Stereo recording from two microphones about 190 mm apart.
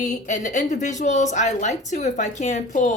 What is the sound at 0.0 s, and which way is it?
A woman's voice, 40° left (ahead or behind).